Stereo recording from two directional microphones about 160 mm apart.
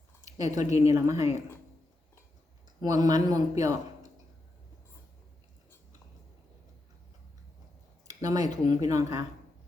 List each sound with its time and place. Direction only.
0.3 s speech: 20° right (ahead or behind)
2.8 s speech: 25° right (ahead or behind)
8.0 s speech: 20° right (ahead or behind)